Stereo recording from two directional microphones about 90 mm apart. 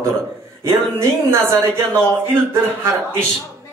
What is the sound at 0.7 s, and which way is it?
Speech, 30° right (ahead or behind).